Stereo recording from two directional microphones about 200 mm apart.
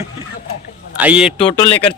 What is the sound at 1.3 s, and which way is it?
Speech, 25° left (ahead or behind).